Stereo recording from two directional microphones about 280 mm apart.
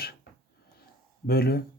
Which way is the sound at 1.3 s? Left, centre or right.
Left.